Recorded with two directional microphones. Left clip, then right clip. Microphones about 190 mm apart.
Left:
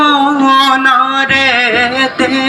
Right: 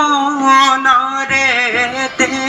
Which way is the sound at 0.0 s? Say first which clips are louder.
Left 4 dB; 30° left (ahead or behind).